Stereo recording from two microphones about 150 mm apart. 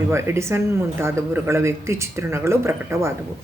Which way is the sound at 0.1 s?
15° right (ahead or behind).